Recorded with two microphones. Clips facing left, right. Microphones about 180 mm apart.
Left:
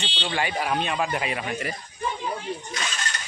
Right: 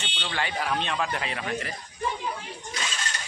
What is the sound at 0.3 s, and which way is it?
Speech, 10° left (ahead or behind).